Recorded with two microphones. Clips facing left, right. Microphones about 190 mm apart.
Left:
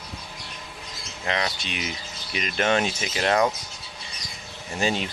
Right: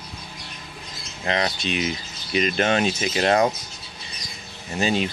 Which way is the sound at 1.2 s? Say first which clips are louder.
Right 3 dB; 35° right (ahead or behind).